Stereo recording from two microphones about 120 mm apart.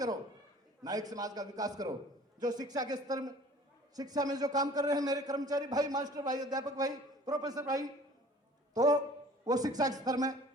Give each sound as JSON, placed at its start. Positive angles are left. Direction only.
{"t": 0.8, "sound": "a man's voice", "side_deg": -30}